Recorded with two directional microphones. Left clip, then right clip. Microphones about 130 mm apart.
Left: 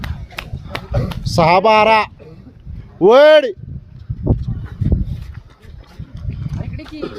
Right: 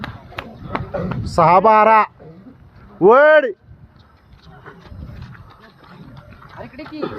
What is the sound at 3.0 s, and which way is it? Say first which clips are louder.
Speech: left 2 dB; 75° left (ahead or behind).